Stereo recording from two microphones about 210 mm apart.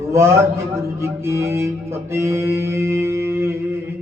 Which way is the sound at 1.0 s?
10° right (ahead or behind).